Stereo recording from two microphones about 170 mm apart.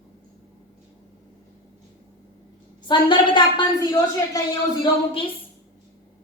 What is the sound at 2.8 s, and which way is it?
A woman's voice, 30° left (ahead or behind).